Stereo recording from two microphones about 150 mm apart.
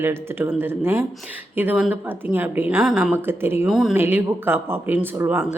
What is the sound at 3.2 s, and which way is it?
Speech, 15° right (ahead or behind).